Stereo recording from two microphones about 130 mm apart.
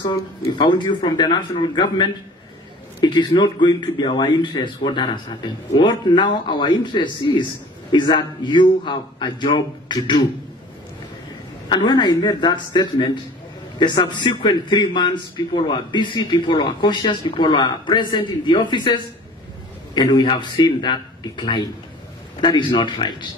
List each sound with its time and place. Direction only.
0.0 s a man's voice: 35° left (ahead or behind)
11.7 s a man's voice: 35° left (ahead or behind)